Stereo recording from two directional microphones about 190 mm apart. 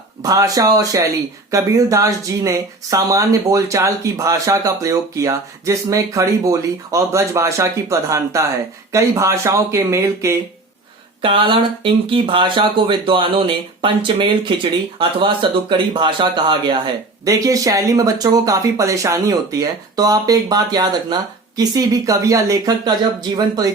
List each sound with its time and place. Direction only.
0.2 s speech: 20° right (ahead or behind)
11.2 s speech: 25° right (ahead or behind)